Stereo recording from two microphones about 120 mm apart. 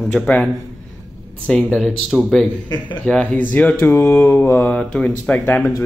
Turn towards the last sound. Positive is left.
turn(degrees=15)  # may be behind; listen again after turning